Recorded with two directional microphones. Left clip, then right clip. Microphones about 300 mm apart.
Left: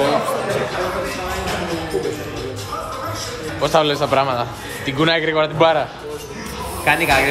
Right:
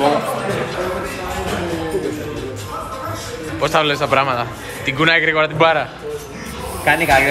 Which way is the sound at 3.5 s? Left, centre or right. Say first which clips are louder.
Even; centre.